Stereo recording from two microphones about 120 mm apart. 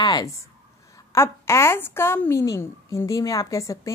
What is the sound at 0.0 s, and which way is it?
Speech, 30° left (ahead or behind).